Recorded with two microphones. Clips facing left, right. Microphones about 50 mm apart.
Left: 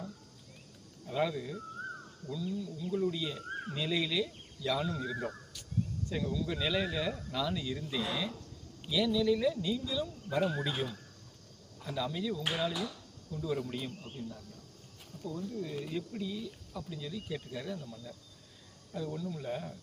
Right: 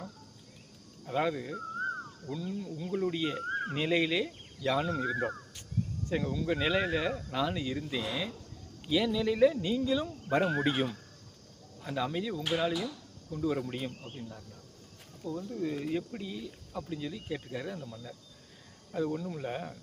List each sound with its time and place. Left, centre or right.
1.0 s speech: right
11.8 s speech: right
15.2 s speech: right